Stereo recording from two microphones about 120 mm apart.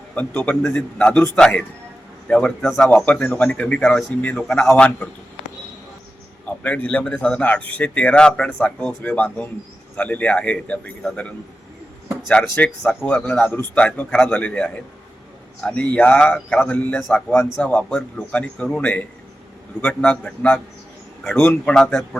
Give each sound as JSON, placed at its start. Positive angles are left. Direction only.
{"t": 0.1, "sound": "a man's voice", "side_deg": 10}
{"t": 6.4, "sound": "speech", "side_deg": 10}
{"t": 12.0, "sound": "a sound", "side_deg": 10}
{"t": 12.5, "sound": "speech", "side_deg": 10}
{"t": 21.6, "sound": "speech", "side_deg": 5}